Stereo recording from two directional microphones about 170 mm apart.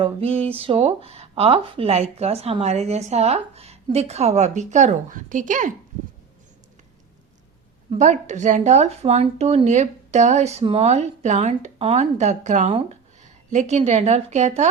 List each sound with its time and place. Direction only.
0.0 s speech: 35° right (ahead or behind)
7.9 s speech: 45° right (ahead or behind)
12.6 s speech: 30° right (ahead or behind)
13.2 s speech: 45° right (ahead or behind)